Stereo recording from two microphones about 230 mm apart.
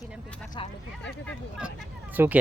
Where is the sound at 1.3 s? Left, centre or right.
Centre.